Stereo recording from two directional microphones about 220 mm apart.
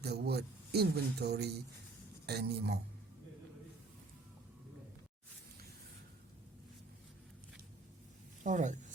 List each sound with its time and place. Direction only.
0.0 s speech: 45° right (ahead or behind)
8.4 s speech: 35° right (ahead or behind)